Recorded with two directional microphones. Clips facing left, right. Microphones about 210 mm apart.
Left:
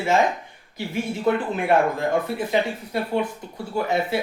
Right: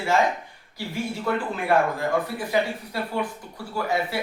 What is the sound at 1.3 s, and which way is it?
Speech, 20° left (ahead or behind).